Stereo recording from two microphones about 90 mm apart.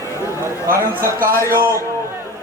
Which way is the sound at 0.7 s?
30° right (ahead or behind).